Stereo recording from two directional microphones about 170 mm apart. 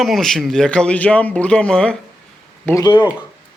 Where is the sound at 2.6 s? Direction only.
20° left (ahead or behind).